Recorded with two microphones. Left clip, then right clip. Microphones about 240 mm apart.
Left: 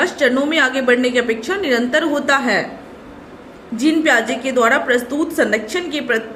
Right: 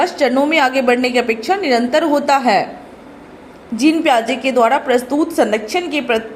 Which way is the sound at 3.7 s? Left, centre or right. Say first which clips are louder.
Right 1 dB; right.